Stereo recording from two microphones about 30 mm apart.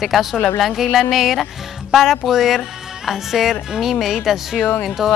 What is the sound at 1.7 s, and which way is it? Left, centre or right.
Music, centre.